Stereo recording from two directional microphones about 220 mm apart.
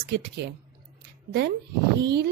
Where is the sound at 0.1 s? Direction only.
50° right (ahead or behind).